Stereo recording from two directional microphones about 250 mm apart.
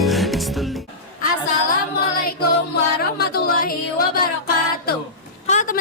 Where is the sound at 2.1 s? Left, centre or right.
Left.